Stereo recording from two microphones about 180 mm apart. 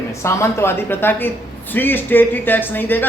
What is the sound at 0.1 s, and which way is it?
Speech, 15° left (ahead or behind).